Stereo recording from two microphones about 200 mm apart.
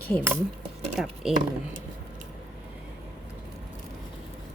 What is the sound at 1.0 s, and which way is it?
Speech, 5° right (ahead or behind).